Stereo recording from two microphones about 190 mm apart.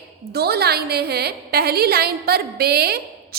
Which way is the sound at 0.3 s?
55° right (ahead or behind).